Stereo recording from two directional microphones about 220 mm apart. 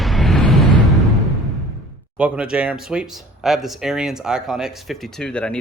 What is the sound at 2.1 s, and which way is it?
Speech, 5° right (ahead or behind).